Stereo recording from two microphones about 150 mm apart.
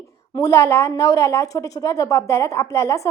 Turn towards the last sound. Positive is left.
turn(degrees=20)  # may be behind; listen again after turning